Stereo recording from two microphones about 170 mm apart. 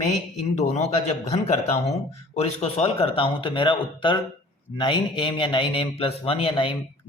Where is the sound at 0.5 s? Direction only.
40° left (ahead or behind).